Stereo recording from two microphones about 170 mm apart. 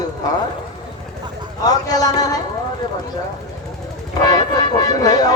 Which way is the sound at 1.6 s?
20° left (ahead or behind).